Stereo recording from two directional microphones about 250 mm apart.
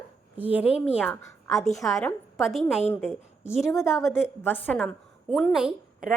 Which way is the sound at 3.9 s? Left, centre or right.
Centre.